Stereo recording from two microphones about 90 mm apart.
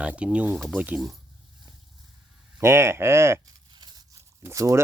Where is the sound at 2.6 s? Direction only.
30° right (ahead or behind).